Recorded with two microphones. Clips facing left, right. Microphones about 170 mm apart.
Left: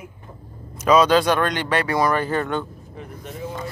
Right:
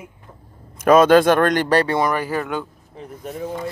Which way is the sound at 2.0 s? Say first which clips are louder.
Even; 15° right (ahead or behind).